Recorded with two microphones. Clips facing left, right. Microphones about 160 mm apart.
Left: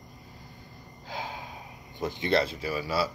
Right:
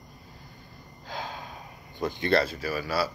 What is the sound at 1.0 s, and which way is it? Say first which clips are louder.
Gasp: even; 15° left (ahead or behind).